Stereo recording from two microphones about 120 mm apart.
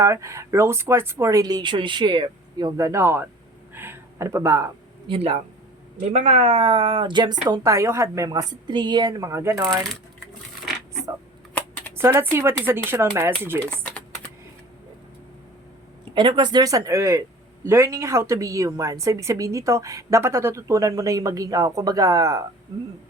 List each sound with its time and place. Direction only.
0.0 s a woman's voice: 25° right (ahead or behind)
5.0 s speech: 55° right (ahead or behind)
6.1 s speech: 70° right (ahead or behind); by 8.3 s 25° right (ahead or behind)
8.3 s speech: 35° right (ahead or behind)
11.9 s a woman's voice: 20° right (ahead or behind)
13.6 s speech: 10° left (ahead or behind)
16.1 s a woman's voice: 40° right (ahead or behind)